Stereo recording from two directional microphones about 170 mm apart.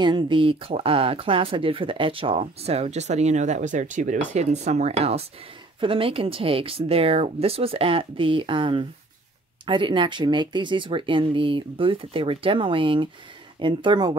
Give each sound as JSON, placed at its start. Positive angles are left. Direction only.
{"t": 0.0, "sound": "speech", "side_deg": -30}